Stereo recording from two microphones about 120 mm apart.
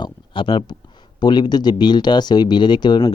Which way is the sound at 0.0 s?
45° left (ahead or behind).